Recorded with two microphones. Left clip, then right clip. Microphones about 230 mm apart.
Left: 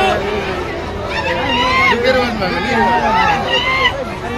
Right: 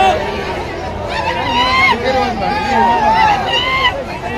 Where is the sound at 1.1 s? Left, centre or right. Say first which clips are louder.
Right 1 dB; centre.